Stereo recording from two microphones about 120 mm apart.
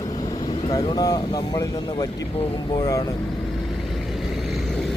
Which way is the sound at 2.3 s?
50° left (ahead or behind).